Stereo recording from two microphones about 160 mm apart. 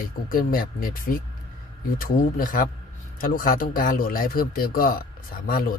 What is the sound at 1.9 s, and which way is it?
Speech, 60° left (ahead or behind).